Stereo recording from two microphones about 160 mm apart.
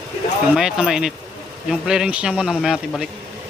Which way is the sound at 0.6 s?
5° right (ahead or behind).